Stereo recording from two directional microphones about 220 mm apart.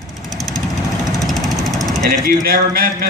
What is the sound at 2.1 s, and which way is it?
Speech, 45° right (ahead or behind).